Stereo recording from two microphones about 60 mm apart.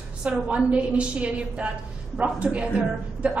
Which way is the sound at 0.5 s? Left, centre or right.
Right.